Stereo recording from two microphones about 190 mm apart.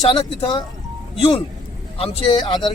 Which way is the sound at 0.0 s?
35° left (ahead or behind).